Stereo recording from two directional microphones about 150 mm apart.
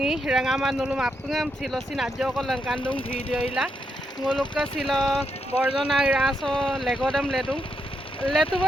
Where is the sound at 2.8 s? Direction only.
35° left (ahead or behind).